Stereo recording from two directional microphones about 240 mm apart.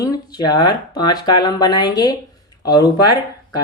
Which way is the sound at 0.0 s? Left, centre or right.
Centre.